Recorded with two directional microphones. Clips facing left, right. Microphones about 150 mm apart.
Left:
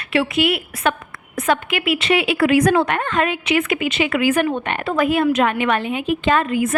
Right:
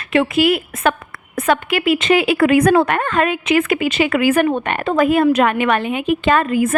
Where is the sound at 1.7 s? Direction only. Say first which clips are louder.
Right 4 dB; 40° right (ahead or behind).